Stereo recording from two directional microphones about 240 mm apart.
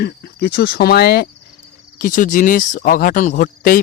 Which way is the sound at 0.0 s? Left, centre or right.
Left.